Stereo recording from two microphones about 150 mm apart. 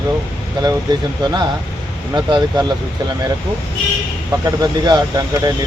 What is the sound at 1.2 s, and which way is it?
Speech, 30° right (ahead or behind).